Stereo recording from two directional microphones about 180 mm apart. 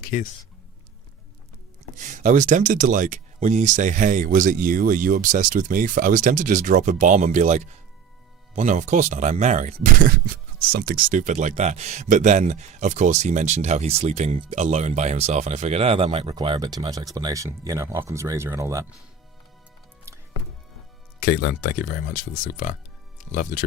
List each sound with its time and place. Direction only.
0.1 s speech: 50° left (ahead or behind)
2.0 s speech: 45° right (ahead or behind); by 18.9 s 15° right (ahead or behind)
21.2 s speech: 55° left (ahead or behind)